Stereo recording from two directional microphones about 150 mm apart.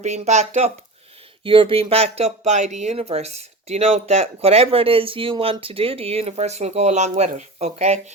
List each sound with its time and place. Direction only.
0.0 s speech: 50° right (ahead or behind)
1.5 s speech: 35° right (ahead or behind)